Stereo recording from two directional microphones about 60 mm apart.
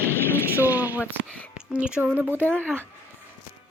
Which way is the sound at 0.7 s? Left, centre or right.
Right.